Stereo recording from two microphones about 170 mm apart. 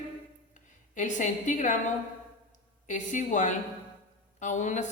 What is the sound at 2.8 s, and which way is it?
A woman's voice, 45° left (ahead or behind).